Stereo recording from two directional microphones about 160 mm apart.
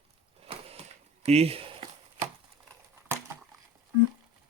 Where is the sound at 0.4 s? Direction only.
40° right (ahead or behind).